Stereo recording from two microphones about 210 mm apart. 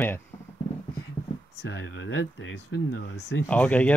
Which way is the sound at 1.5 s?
60° left (ahead or behind).